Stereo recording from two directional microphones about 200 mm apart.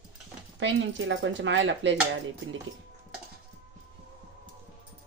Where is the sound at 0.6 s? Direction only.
65° right (ahead or behind).